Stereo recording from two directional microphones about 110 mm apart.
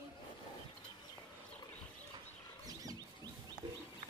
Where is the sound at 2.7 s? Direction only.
35° right (ahead or behind).